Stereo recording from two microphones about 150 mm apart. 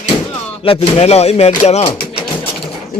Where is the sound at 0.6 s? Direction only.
40° left (ahead or behind).